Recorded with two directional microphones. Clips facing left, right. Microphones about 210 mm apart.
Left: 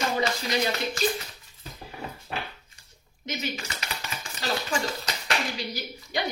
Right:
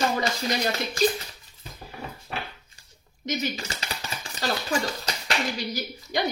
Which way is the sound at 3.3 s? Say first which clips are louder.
Right 4 dB; 35° right (ahead or behind).